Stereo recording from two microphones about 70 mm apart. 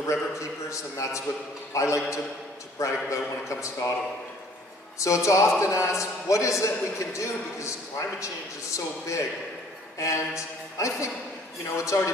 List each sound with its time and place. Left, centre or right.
0.0 s a man's voice: left
4.9 s a man's voice: left